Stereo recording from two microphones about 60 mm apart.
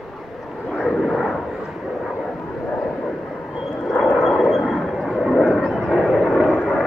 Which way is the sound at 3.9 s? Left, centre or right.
Centre.